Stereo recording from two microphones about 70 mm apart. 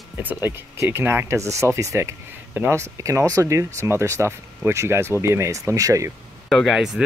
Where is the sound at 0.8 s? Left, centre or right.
Right.